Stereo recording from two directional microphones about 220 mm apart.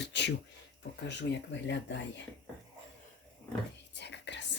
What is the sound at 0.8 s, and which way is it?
Speech, 50° left (ahead or behind).